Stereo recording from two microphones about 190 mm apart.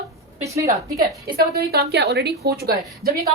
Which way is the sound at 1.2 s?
55° right (ahead or behind).